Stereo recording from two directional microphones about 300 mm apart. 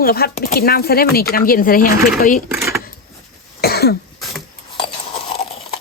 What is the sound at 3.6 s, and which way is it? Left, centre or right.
Cough, left.